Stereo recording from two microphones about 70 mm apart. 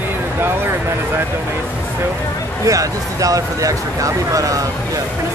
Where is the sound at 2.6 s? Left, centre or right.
Right.